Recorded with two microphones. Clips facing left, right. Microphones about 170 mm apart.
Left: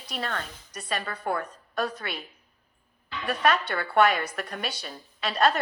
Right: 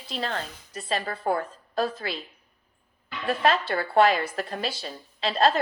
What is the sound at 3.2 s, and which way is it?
A woman's voice, 25° right (ahead or behind).